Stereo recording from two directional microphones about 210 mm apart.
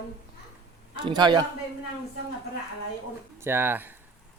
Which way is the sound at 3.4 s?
10° right (ahead or behind).